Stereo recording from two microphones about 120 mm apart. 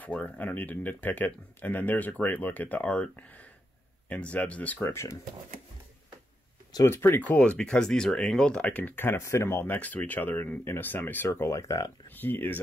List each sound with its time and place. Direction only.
0.0 s speech: 10° left (ahead or behind)
4.8 s speech: 25° left (ahead or behind)
6.7 s speech: 25° left (ahead or behind)
12.2 s speech: 15° left (ahead or behind)